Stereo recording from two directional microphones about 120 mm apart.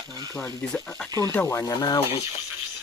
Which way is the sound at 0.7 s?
5° left (ahead or behind).